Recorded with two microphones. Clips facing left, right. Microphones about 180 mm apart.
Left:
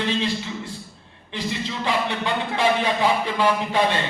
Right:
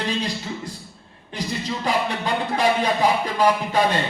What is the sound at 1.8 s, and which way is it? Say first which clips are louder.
Music: right 1 dB; 40° right (ahead or behind).